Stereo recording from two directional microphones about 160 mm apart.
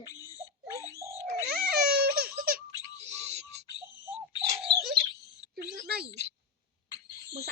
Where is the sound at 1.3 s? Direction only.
75° right (ahead or behind).